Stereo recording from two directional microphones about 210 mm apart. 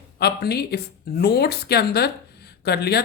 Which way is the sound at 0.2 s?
50° left (ahead or behind).